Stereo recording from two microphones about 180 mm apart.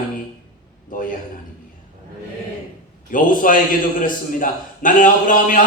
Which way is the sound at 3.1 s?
50° left (ahead or behind).